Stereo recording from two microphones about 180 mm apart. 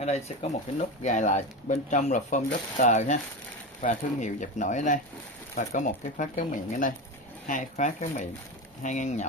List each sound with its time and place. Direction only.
0.0 s speech: 40° left (ahead or behind)